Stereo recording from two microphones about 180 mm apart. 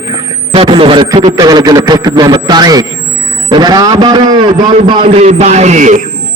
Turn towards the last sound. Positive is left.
turn(degrees=-40)  # may be behind; listen again after turning